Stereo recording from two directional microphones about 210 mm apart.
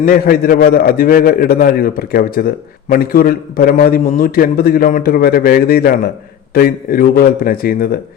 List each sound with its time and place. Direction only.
0.0 s a man's voice: 45° left (ahead or behind)